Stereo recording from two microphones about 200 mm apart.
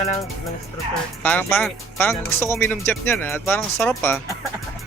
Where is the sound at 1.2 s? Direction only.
10° left (ahead or behind).